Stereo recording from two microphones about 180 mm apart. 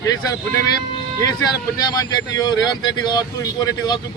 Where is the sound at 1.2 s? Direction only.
20° left (ahead or behind).